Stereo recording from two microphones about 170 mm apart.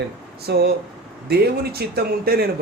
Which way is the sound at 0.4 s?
70° right (ahead or behind).